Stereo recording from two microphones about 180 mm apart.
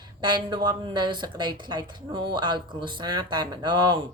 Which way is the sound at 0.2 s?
25° right (ahead or behind).